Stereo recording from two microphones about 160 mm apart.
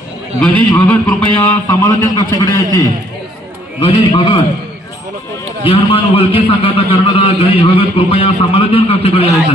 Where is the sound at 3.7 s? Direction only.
35° left (ahead or behind).